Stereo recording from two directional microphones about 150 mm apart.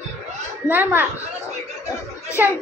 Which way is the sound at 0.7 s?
15° right (ahead or behind).